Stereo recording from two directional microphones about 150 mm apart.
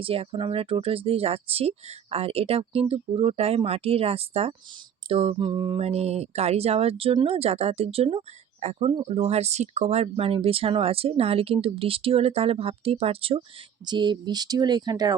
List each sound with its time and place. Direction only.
0.0 s speech: 40° right (ahead or behind)